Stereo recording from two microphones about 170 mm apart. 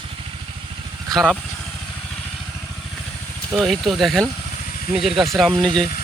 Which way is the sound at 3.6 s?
Centre (ahead or behind).